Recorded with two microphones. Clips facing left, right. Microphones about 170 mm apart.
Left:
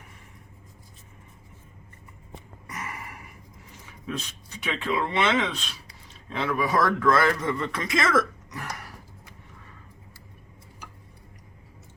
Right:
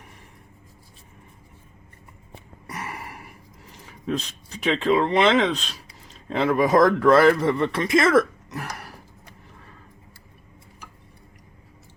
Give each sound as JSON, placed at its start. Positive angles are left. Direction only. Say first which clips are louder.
{"t": 2.6, "sound": "gasp", "louder": "right 3 dB", "side_deg": -35}
{"t": 3.7, "sound": "a sound", "louder": "right 7 dB", "side_deg": -35}
{"t": 4.6, "sound": "speech", "louder": "right 7 dB", "side_deg": -35}